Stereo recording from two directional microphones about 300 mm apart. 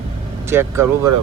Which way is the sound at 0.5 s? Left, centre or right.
Centre.